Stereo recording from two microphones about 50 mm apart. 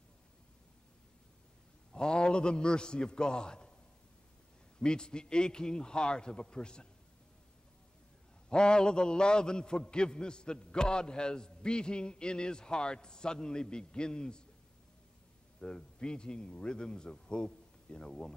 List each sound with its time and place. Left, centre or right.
1.9 s a man's voice: centre
4.7 s a man's voice: centre
8.5 s a man's voice: centre
15.6 s a man's voice: centre